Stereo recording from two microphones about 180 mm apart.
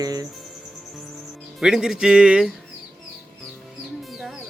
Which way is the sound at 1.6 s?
5° right (ahead or behind).